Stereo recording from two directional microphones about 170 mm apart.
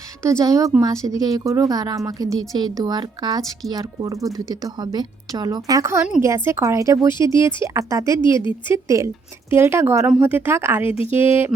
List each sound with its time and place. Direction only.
0.2 s a woman's voice: 15° right (ahead or behind)